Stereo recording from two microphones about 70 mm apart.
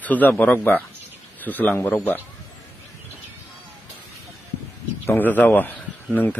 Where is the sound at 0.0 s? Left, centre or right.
Left.